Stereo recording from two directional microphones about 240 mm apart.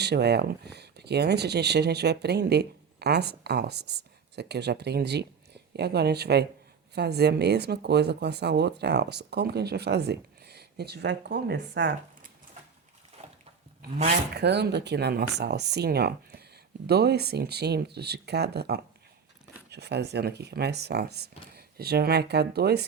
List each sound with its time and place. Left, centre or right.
0.0 s speech: right
13.2 s a sound: right
14.3 s speech: right